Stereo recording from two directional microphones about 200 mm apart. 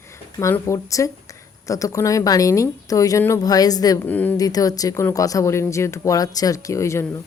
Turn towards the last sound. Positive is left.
turn(degrees=15)  # may be behind; listen again after turning